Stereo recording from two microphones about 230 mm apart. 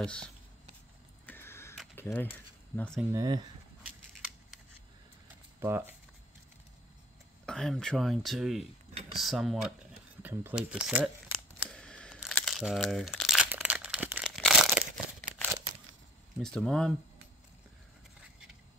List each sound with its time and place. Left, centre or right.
0.0 s speech: centre
1.2 s a sound: centre
2.0 s speech: centre
3.1 s speech: centre
3.8 s scissors: centre
5.6 s speech: centre
7.4 s speech: centre
11.6 s crumpling: centre
16.3 s speech: centre